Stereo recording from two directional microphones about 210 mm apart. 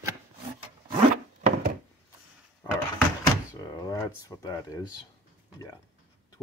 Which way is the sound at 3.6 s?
15° left (ahead or behind).